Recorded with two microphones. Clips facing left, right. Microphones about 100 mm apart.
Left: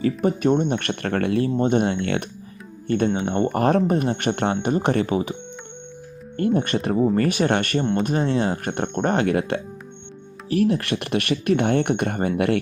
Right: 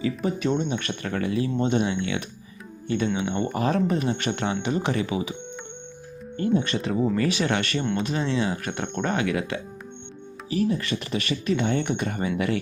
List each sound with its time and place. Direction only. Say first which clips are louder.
0.0 s speech: left 5 dB; 50° left (ahead or behind)
1.5 s speech: left 4 dB; 40° left (ahead or behind)
3.1 s speech: left 4 dB; 45° left (ahead or behind)
6.3 s speech: left 3 dB; 55° left (ahead or behind)
10.5 s speech: left 4 dB; 60° left (ahead or behind)